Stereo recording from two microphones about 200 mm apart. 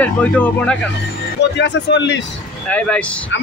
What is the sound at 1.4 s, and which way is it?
Speech, 60° left (ahead or behind).